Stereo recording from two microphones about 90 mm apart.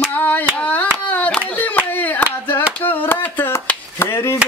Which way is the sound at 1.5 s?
15° left (ahead or behind).